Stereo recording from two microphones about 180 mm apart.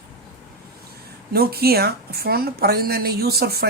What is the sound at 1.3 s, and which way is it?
Speech, 60° right (ahead or behind).